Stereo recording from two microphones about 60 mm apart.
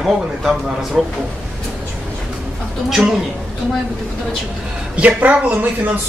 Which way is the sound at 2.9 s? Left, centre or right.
Centre.